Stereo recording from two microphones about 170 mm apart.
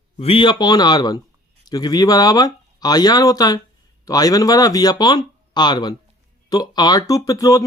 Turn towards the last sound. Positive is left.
turn(degrees=20)  # may be behind; listen again after turning